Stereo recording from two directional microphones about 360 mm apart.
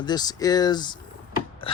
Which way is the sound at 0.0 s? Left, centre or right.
Centre.